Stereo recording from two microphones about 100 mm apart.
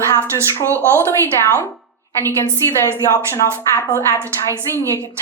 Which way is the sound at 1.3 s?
25° left (ahead or behind).